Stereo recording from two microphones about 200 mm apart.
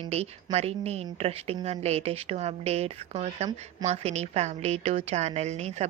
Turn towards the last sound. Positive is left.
turn(degrees=-35)  # may be behind; listen again after turning